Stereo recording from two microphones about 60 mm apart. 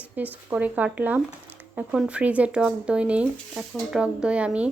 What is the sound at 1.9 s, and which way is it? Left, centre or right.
Speech, centre.